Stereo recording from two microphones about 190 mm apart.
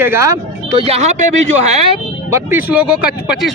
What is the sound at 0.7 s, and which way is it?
Speech, 30° right (ahead or behind).